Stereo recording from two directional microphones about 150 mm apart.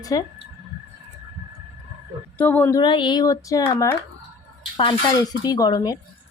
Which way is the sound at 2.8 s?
30° left (ahead or behind).